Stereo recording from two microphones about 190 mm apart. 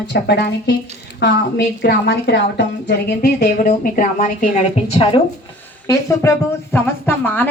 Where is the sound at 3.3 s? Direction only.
40° left (ahead or behind).